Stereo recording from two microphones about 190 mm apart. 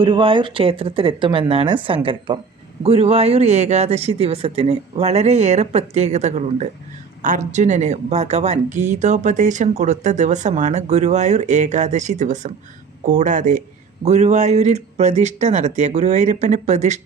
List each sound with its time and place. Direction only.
0.0 s speech: 25° right (ahead or behind)